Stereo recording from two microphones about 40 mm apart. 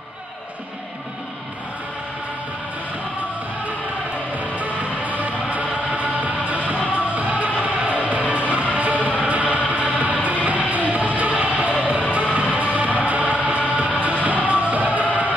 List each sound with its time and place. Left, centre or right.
4.4 s music: right